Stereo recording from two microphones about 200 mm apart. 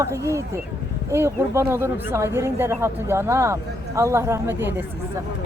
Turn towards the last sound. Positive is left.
turn(degrees=-10)  # may be behind; listen again after turning